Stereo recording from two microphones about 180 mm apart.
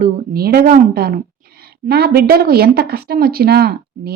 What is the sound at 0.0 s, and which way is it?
A woman's voice, 60° right (ahead or behind).